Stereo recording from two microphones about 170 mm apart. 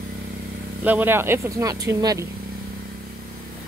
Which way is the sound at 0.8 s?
10° right (ahead or behind).